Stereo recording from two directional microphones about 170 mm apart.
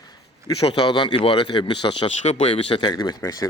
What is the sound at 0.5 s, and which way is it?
Speech, 30° left (ahead or behind).